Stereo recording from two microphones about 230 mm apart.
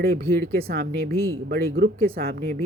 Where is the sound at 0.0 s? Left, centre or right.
Right.